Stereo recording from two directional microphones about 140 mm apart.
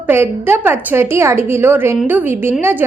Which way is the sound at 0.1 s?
15° right (ahead or behind).